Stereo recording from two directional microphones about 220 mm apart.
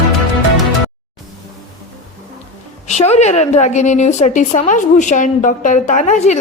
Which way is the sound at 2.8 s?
30° left (ahead or behind).